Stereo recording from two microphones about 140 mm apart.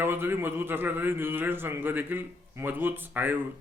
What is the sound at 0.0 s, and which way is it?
A man's voice, 15° right (ahead or behind).